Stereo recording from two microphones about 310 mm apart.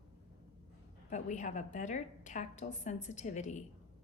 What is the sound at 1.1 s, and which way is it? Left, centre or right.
A woman's voice, left.